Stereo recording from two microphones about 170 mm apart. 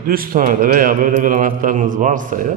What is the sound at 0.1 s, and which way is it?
A man's voice, 55° right (ahead or behind).